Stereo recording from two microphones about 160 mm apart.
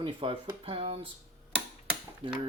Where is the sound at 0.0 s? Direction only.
35° right (ahead or behind).